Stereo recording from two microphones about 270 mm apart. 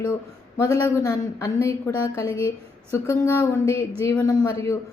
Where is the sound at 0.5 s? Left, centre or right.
Centre.